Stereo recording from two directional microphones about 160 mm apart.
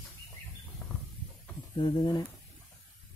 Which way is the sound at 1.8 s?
25° left (ahead or behind).